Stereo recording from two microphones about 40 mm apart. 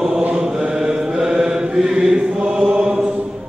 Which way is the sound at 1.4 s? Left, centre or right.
Centre.